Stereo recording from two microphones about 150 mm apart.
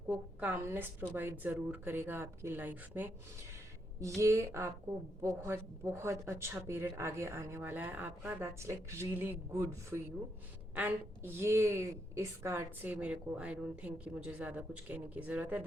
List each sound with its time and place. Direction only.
0.1 s a woman's voice: 10° right (ahead or behind)
4.2 s a woman's voice: 20° right (ahead or behind)